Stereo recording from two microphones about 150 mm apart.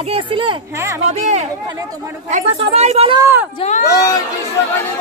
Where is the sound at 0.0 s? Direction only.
40° right (ahead or behind).